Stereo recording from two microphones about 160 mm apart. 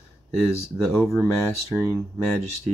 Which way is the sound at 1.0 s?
Centre (ahead or behind).